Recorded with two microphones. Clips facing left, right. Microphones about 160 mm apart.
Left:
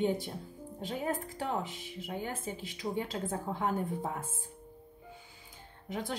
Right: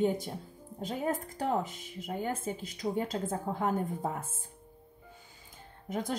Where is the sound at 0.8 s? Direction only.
40° right (ahead or behind).